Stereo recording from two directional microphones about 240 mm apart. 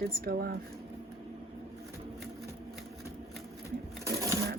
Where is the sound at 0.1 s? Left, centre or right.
Right.